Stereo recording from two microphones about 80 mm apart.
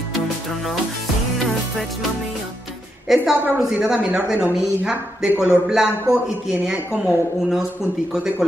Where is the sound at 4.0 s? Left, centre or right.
Centre.